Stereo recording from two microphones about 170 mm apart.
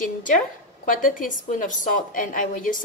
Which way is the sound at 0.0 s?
50° left (ahead or behind).